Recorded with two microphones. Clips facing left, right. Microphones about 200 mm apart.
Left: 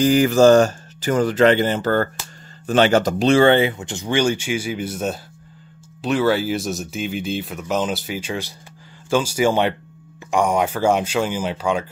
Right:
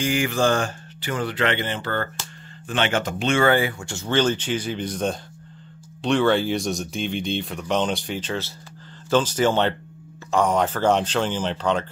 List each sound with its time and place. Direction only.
0.0 s speech: 40° left (ahead or behind); by 11.8 s 10° left (ahead or behind)